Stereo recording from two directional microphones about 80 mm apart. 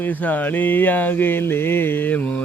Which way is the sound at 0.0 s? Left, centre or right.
Left.